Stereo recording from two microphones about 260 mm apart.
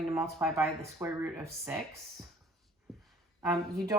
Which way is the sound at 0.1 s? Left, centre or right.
Centre.